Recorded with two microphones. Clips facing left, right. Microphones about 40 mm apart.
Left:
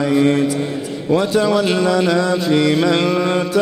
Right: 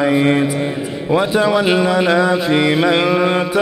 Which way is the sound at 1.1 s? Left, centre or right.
Right.